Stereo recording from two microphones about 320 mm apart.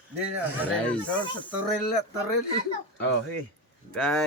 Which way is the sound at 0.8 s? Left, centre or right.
Centre.